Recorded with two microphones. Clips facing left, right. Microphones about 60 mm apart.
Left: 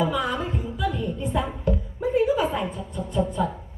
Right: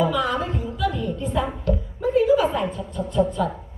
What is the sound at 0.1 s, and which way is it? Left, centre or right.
Music, centre.